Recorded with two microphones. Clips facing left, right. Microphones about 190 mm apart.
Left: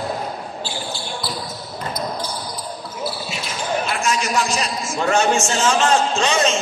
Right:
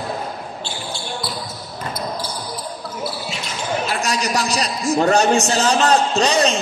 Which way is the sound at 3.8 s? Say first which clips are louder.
Even; 35° right (ahead or behind).